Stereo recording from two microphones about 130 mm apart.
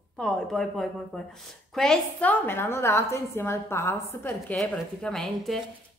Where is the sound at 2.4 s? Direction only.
15° left (ahead or behind).